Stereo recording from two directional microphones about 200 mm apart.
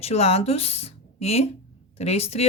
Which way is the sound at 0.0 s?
30° left (ahead or behind).